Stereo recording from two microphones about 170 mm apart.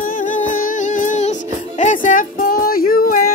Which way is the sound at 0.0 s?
50° left (ahead or behind).